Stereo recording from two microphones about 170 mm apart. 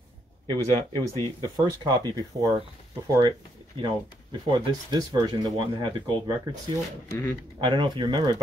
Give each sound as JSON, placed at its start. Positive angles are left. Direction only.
{"t": 0.5, "sound": "speech", "side_deg": 15}
{"t": 1.2, "sound": "speech", "side_deg": -25}
{"t": 7.1, "sound": "speech", "side_deg": 10}
{"t": 7.6, "sound": "speech", "side_deg": -25}